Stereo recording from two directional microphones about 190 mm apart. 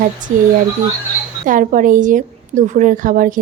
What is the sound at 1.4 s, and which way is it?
A woman's voice, 45° right (ahead or behind).